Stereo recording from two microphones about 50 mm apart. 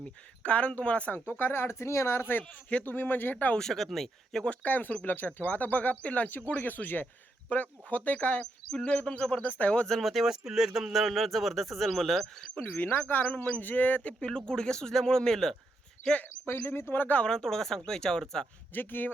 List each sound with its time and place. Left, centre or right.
0.0 s a man's voice: left
1.3 s speech: left
2.4 s a man's voice: left
2.8 s speech: left
3.6 s speech: centre
4.4 s a man's voice: left
9.8 s speech: centre
10.1 s speech: centre
12.6 s a man's voice: left; by 15.5 s centre
16.5 s speech: left
17.2 s speech: centre
18.7 s speech: left